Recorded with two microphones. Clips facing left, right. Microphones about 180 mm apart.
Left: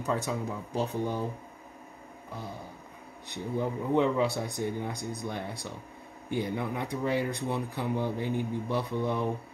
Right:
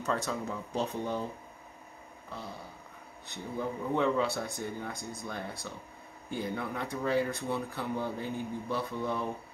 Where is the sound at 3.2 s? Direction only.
15° left (ahead or behind).